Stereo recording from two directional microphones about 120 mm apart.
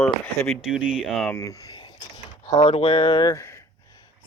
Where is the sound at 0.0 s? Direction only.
5° left (ahead or behind).